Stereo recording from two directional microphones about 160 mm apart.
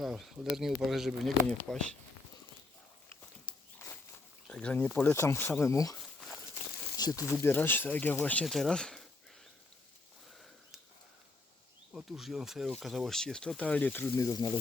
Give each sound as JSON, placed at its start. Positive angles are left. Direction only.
{"t": 0.0, "sound": "speech", "side_deg": 0}
{"t": 3.5, "sound": "walk", "side_deg": 30}
{"t": 4.4, "sound": "speech", "side_deg": 5}
{"t": 6.0, "sound": "walk", "side_deg": 0}
{"t": 6.9, "sound": "speech", "side_deg": 20}
{"t": 10.3, "sound": "a sound", "side_deg": 0}
{"t": 11.9, "sound": "speech", "side_deg": 0}